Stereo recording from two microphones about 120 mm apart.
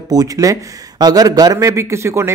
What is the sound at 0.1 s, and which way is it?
Speech, 30° right (ahead or behind).